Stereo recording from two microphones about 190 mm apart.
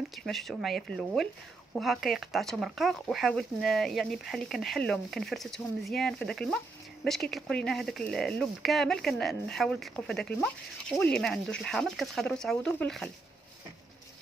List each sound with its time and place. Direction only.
0.1 s speech: centre (ahead or behind)